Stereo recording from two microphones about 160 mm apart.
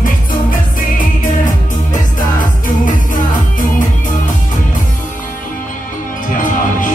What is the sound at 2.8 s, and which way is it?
Music, 55° left (ahead or behind).